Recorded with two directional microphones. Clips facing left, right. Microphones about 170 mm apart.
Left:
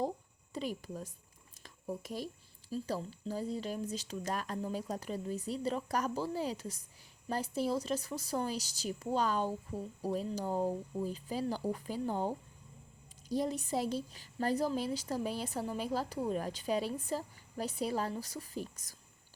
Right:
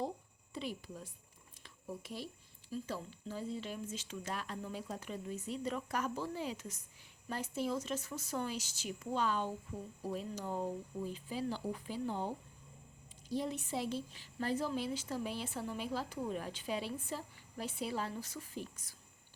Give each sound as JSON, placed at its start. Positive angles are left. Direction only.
{"t": 0.5, "sound": "a woman's voice", "side_deg": 45}